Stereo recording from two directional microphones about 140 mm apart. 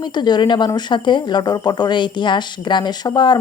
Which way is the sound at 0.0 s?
30° left (ahead or behind).